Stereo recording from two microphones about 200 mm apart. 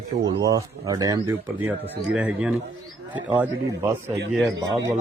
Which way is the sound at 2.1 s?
5° right (ahead or behind).